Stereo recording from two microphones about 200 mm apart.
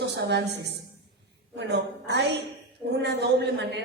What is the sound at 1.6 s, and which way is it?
A woman's voice, 60° right (ahead or behind).